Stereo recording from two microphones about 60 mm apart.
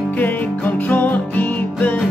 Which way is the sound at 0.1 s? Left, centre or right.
Left.